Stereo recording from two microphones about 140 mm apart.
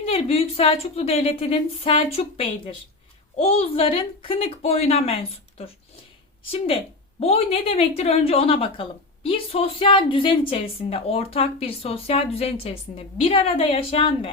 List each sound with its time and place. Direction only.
0.0 s a woman's voice: 45° left (ahead or behind)